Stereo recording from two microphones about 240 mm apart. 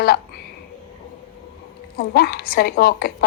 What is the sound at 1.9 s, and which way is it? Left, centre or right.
A woman's voice, left.